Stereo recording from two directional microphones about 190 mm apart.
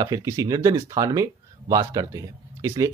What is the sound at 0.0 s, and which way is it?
Speech, 20° right (ahead or behind).